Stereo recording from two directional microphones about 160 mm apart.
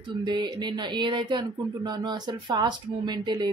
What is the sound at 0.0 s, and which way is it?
Speech, 30° right (ahead or behind).